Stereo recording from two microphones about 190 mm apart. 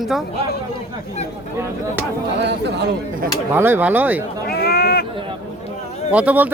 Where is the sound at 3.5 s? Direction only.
10° right (ahead or behind).